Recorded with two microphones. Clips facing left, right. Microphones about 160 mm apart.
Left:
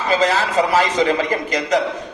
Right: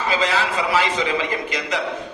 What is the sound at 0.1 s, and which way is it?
A man's voice, 45° left (ahead or behind).